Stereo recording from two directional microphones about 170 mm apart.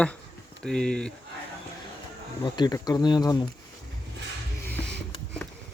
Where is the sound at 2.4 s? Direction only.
25° left (ahead or behind).